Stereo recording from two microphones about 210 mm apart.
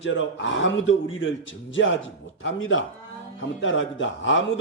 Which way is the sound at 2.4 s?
70° left (ahead or behind).